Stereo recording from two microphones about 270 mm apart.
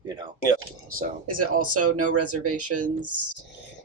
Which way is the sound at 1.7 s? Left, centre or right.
Right.